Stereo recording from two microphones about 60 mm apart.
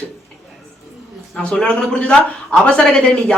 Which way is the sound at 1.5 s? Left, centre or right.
Centre.